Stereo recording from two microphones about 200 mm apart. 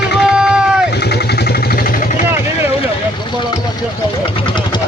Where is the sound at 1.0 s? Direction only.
55° left (ahead or behind).